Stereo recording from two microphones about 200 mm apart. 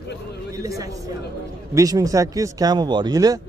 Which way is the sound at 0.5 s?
15° right (ahead or behind).